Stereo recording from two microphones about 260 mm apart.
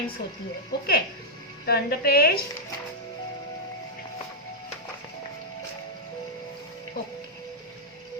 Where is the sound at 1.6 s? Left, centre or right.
Left.